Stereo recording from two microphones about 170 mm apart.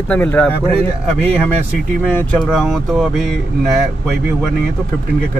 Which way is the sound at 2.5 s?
Centre (ahead or behind).